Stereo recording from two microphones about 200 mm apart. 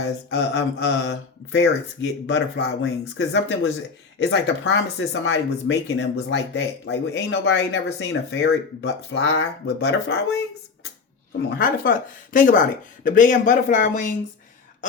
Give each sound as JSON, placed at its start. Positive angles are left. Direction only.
{"t": 0.3, "sound": "speech", "side_deg": 60}
{"t": 1.5, "sound": "speech", "side_deg": 70}
{"t": 3.2, "sound": "speech", "side_deg": 60}
{"t": 11.5, "sound": "a woman's voice", "side_deg": 45}